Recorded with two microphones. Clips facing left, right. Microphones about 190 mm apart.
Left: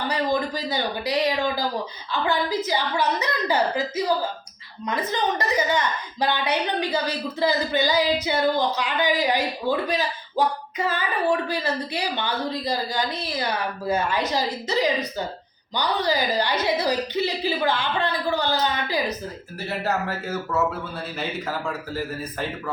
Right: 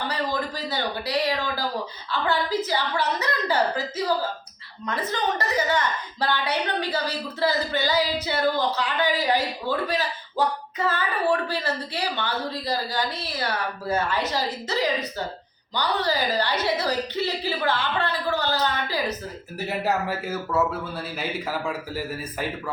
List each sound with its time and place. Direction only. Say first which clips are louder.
0.3 s a woman's voice: left 3 dB; 15° left (ahead or behind)
19.6 s speech: right 1 dB; 10° right (ahead or behind)